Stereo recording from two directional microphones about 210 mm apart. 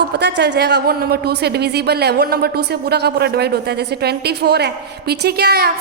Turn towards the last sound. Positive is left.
turn(degrees=-50)  # may be behind; listen again after turning